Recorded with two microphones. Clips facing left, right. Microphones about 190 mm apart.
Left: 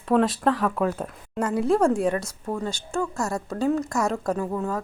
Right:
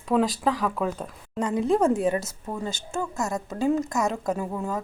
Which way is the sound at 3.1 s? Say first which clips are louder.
Left 1 dB; 20° right (ahead or behind).